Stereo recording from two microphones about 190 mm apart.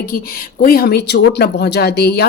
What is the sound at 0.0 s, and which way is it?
Speech, 50° left (ahead or behind).